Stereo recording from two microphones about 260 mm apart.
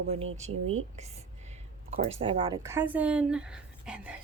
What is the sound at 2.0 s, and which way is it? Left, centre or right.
Speech, right.